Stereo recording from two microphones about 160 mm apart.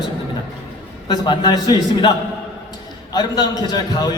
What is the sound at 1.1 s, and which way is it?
A man's voice, 25° left (ahead or behind).